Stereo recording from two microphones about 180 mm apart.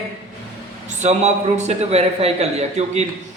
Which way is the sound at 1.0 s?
40° right (ahead or behind).